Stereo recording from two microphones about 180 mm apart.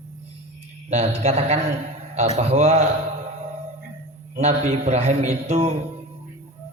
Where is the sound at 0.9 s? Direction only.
40° right (ahead or behind).